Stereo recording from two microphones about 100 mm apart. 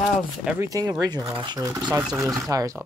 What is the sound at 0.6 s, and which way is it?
Speech, 35° right (ahead or behind).